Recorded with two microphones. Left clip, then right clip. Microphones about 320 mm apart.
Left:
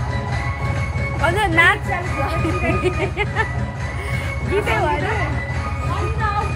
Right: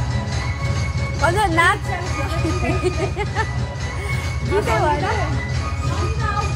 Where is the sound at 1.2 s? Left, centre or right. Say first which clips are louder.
Left 1 dB; centre.